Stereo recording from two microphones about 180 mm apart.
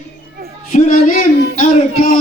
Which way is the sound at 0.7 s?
45° left (ahead or behind).